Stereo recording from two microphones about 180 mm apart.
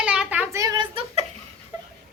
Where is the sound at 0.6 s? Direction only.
25° right (ahead or behind).